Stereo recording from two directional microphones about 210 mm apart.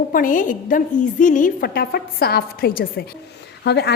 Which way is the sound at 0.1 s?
40° left (ahead or behind).